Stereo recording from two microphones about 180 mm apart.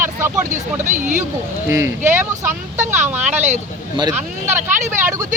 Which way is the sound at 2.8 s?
40° right (ahead or behind).